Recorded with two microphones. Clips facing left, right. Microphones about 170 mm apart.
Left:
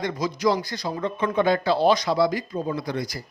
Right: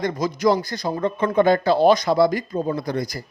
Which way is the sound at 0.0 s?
50° right (ahead or behind).